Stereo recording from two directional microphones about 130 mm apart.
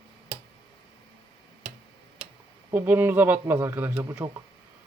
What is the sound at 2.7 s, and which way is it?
Speech, 15° right (ahead or behind).